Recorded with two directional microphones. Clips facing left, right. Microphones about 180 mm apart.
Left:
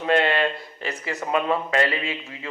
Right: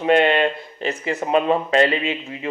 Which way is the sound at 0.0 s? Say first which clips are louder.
Right 5 dB; 20° right (ahead or behind).